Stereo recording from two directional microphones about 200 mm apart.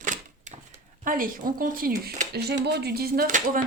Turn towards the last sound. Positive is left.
turn(degrees=-40)  # may be behind; listen again after turning